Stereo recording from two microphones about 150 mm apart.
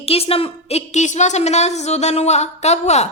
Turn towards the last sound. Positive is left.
turn(degrees=50)  # may be behind; listen again after turning